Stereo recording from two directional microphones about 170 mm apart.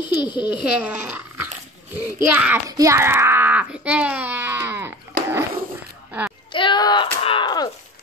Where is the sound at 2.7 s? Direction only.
20° right (ahead or behind).